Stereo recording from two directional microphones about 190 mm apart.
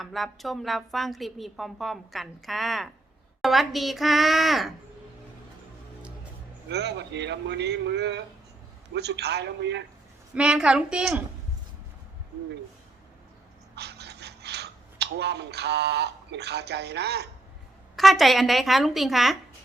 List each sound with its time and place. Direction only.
0.0 s a woman's voice: centre (ahead or behind)
6.7 s a man's voice: 60° right (ahead or behind)
10.3 s a woman's voice: 5° right (ahead or behind)
13.7 s a sound: 60° right (ahead or behind)
17.9 s a woman's voice: centre (ahead or behind)